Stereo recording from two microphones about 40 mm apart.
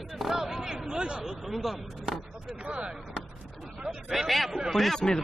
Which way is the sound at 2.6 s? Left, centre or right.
Right.